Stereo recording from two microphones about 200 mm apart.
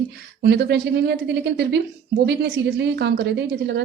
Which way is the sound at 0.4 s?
60° right (ahead or behind).